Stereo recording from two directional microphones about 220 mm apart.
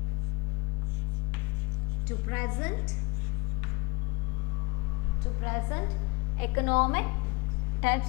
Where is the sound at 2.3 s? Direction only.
15° left (ahead or behind).